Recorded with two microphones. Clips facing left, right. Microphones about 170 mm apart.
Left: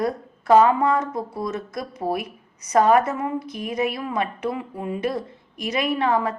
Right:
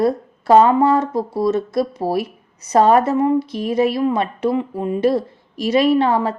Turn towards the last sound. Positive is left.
turn(degrees=-30)  # may be behind; listen again after turning